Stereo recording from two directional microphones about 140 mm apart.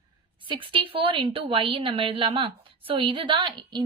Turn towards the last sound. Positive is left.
turn(degrees=-35)  # may be behind; listen again after turning